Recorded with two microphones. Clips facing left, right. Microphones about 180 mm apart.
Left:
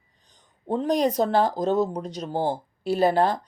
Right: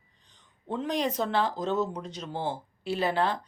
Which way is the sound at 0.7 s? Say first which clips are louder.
Left 7 dB; 40° left (ahead or behind).